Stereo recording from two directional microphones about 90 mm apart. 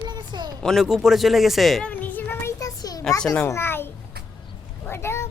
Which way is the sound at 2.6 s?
45° left (ahead or behind).